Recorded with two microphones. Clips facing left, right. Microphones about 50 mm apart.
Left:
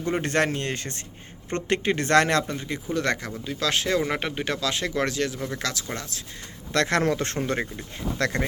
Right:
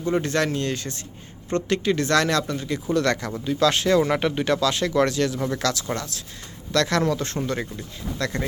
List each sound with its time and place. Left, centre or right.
0.1 s speech: left
2.5 s speech: left
6.7 s speech: left